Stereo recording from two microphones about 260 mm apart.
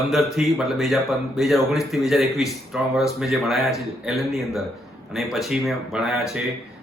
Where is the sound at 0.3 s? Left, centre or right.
Centre.